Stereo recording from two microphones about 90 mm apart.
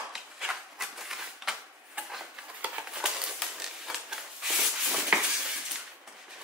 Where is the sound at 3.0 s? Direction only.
5° right (ahead or behind).